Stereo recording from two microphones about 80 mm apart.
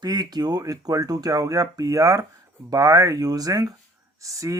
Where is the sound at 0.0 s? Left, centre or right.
Right.